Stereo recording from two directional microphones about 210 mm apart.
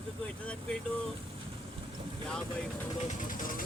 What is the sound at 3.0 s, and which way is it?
Speech, 40° left (ahead or behind).